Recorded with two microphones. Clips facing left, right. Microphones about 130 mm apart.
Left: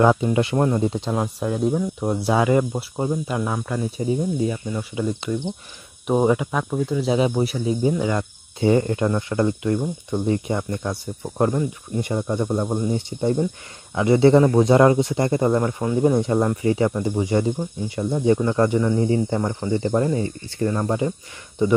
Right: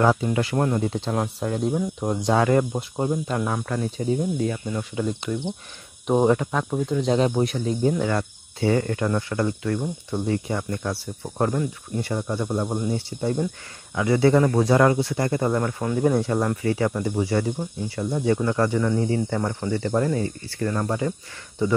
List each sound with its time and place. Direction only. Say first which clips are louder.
0.0 s speech: left 3 dB; 15° left (ahead or behind)
1.1 s speech: left 2 dB; 5° left (ahead or behind)